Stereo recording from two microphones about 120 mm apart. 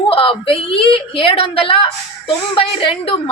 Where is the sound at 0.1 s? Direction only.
45° left (ahead or behind).